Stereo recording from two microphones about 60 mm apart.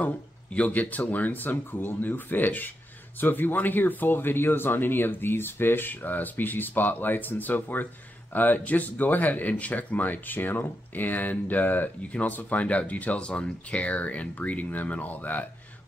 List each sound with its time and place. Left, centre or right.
0.0 s speech: left